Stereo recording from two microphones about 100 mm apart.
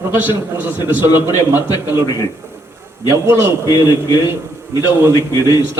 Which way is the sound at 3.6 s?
45° left (ahead or behind).